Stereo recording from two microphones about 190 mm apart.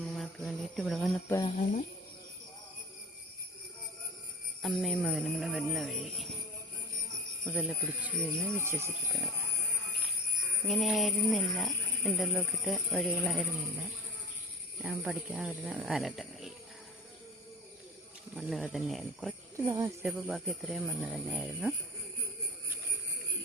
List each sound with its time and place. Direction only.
0.1 s jingle bell: centre (ahead or behind)
1.5 s speech: 40° left (ahead or behind)
4.6 s speech: centre (ahead or behind)
7.4 s speech: 5° right (ahead or behind)
8.5 s speech: 10° right (ahead or behind)
10.7 s speech: centre (ahead or behind)
18.3 s speech: centre (ahead or behind)
19.5 s speech: 15° right (ahead or behind)
20.1 s speech: centre (ahead or behind)